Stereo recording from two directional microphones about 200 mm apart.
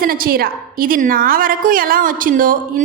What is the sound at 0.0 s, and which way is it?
A woman's voice, 45° right (ahead or behind).